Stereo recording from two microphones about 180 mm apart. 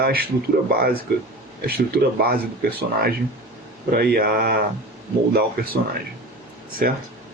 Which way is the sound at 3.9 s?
55° right (ahead or behind).